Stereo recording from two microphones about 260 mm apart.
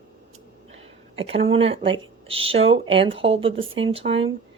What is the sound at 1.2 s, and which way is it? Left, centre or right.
Speech, right.